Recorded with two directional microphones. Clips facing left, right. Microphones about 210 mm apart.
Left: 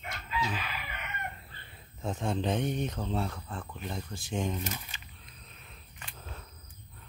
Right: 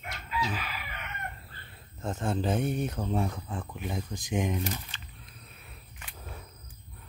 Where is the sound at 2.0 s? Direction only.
Centre (ahead or behind).